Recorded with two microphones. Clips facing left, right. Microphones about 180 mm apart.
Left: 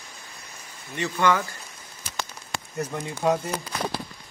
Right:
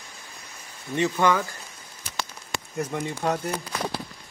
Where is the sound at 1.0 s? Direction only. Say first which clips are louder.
Right 1 dB; 15° right (ahead or behind).